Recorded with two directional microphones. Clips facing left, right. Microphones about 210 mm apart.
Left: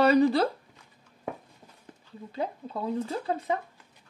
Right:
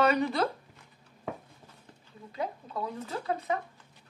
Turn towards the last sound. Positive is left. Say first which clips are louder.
# left 2 dB
turn(degrees=30)  # may be behind; listen again after turning